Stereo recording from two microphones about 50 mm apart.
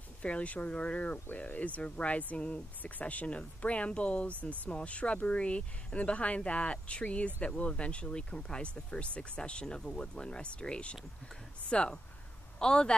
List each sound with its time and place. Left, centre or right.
0.2 s speech: left